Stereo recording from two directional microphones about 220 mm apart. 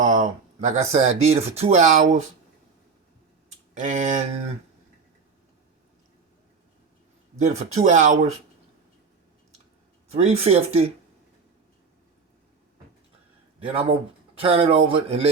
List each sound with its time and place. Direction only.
0.0 s speech: 35° right (ahead or behind)
3.8 s speech: 35° right (ahead or behind)
7.3 s speech: 30° right (ahead or behind)
10.1 s speech: 30° right (ahead or behind)
14.3 s speech: 25° right (ahead or behind)